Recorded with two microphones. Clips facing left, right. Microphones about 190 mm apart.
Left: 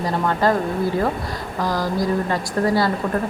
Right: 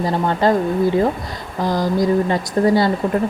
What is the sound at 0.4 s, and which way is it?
Speech, 25° right (ahead or behind).